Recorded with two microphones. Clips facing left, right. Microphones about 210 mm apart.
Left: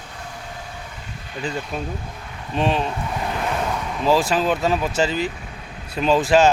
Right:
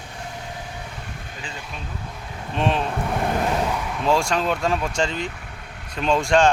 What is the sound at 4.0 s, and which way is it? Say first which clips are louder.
Speech: left 3 dB; centre (ahead or behind).